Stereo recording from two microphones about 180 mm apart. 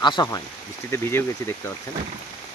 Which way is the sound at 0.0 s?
25° left (ahead or behind).